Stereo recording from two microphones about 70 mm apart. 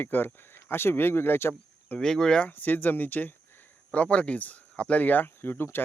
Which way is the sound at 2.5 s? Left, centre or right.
Left.